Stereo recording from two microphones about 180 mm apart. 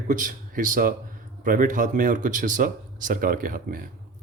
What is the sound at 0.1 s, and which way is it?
Speech, 50° right (ahead or behind).